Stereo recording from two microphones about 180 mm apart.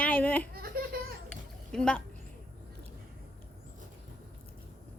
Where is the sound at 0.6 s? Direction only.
55° right (ahead or behind).